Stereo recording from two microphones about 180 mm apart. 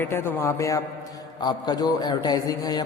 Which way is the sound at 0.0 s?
10° left (ahead or behind).